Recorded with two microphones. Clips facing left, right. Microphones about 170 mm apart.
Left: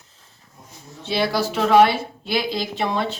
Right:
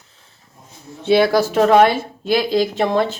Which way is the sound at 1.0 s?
55° right (ahead or behind).